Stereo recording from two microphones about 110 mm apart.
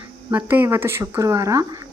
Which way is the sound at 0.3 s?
15° right (ahead or behind).